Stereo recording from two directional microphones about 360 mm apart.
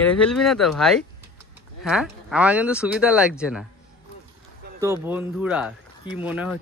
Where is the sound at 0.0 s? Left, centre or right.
Centre.